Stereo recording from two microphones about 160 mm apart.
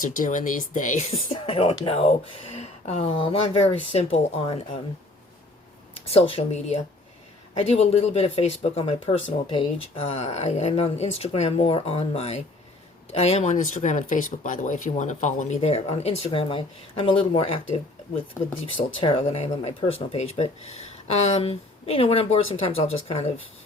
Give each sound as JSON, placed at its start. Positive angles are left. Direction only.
{"t": 0.0, "sound": "speech", "side_deg": 55}
{"t": 6.1, "sound": "speech", "side_deg": 35}
{"t": 18.8, "sound": "speech", "side_deg": 35}